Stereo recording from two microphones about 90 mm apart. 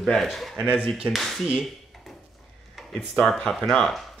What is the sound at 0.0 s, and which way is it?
Speech, centre (ahead or behind).